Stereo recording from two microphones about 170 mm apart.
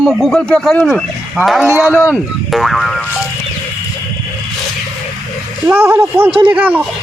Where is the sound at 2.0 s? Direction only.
Centre (ahead or behind).